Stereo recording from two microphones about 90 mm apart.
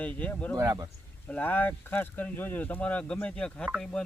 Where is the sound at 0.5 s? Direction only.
40° right (ahead or behind).